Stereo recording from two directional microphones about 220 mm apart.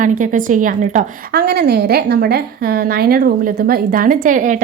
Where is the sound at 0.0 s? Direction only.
35° right (ahead or behind).